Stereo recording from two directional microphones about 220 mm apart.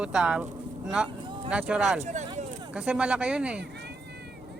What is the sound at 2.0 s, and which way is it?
Speech, 30° right (ahead or behind).